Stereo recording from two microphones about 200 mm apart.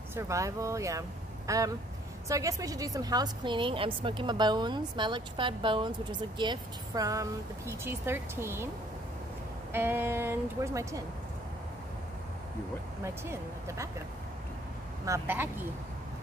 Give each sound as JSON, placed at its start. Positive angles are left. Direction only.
{"t": 0.1, "sound": "a woman's voice", "side_deg": -15}
{"t": 9.7, "sound": "speech", "side_deg": -10}
{"t": 13.0, "sound": "speech", "side_deg": -15}
{"t": 15.0, "sound": "speech", "side_deg": -10}